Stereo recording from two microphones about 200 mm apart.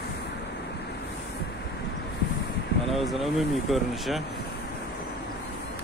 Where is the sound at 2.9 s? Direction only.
Centre (ahead or behind).